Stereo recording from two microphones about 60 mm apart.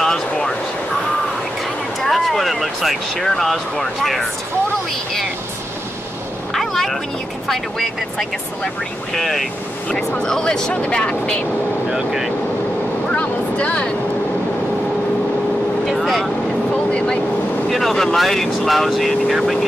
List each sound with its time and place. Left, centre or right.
0.0 s a sound: centre
2.0 s speech: centre
6.5 s a sound: centre
7.4 s speech: centre
11.9 s speech: centre
13.1 s a sound: left
15.8 s vehicle: centre
16.7 s vehicle: centre
17.6 s speech: centre